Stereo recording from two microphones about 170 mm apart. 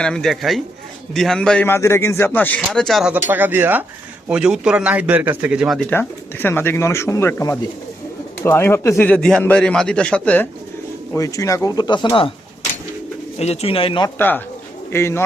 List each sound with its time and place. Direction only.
0.0 s a man's voice: 5° left (ahead or behind)
5.9 s a man's voice: 10° left (ahead or behind); by 12.3 s 30° left (ahead or behind)
13.4 s speech: 35° left (ahead or behind)
14.2 s a man's voice: 10° left (ahead or behind)